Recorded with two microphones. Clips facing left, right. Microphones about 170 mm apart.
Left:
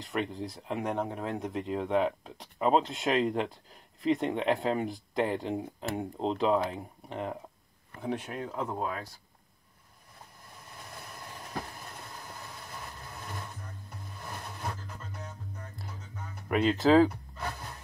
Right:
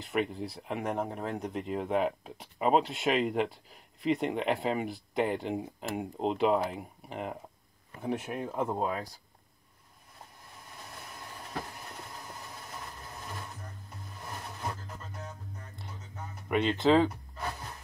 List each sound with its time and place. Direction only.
0.0 s speech: 5° right (ahead or behind)
8.7 s speech: 20° right (ahead or behind)
16.4 s speech: 5° left (ahead or behind)